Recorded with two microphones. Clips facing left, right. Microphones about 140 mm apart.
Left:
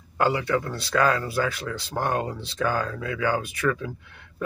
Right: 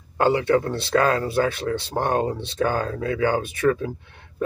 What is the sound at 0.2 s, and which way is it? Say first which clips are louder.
Speech: right 4 dB; 25° right (ahead or behind).